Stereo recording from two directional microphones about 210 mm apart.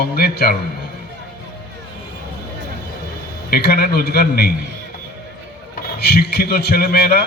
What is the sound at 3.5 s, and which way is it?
A man's voice, 50° left (ahead or behind).